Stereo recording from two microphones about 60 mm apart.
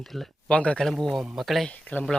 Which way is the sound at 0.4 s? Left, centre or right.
Centre.